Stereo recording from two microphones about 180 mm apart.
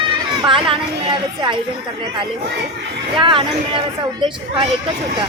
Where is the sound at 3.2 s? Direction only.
30° right (ahead or behind).